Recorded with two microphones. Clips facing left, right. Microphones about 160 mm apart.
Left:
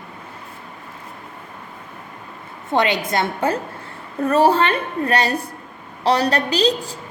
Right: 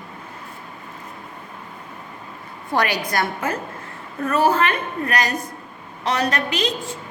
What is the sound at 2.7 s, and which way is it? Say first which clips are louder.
A woman's voice: left 3 dB; 25° left (ahead or behind).